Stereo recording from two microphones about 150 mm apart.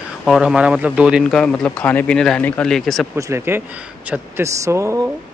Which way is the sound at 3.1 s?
20° right (ahead or behind).